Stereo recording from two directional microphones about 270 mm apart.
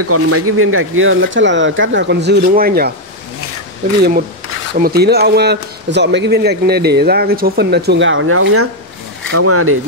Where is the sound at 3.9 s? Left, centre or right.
Right.